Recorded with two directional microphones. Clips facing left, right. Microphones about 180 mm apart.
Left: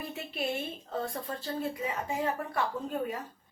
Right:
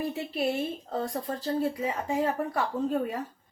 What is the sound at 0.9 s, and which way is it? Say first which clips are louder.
A woman's voice: right 4 dB; 35° right (ahead or behind).